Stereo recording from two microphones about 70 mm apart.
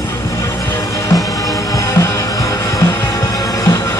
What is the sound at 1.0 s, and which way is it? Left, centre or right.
Music, left.